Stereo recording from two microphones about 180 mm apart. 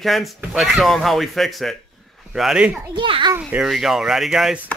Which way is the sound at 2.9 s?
25° right (ahead or behind).